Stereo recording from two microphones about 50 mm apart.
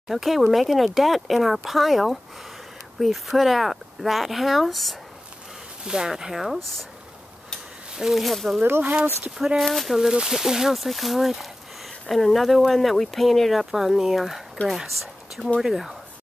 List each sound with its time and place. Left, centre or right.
0.1 s speech: centre
5.9 s speech: centre
8.0 s speech: centre
8.6 s speech: right
9.6 s speech: centre